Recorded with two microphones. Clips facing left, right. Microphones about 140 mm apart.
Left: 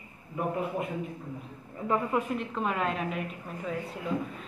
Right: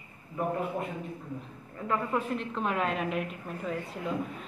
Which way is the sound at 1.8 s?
10° left (ahead or behind).